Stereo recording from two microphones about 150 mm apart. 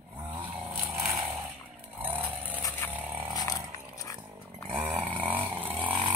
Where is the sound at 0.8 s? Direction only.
20° right (ahead or behind).